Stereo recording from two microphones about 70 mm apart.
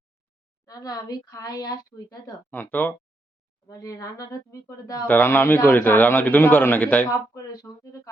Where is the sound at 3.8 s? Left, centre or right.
Left.